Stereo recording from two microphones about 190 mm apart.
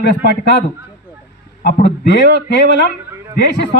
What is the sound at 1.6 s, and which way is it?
Speech, 65° left (ahead or behind).